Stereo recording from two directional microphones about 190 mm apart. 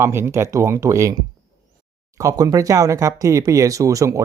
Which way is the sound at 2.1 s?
20° right (ahead or behind).